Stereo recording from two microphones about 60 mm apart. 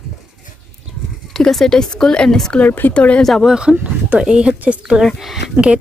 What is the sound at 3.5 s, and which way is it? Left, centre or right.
A woman's voice, centre.